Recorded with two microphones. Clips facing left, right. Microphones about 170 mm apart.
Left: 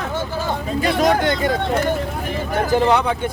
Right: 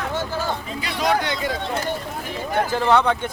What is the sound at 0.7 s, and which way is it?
Speech, 45° left (ahead or behind).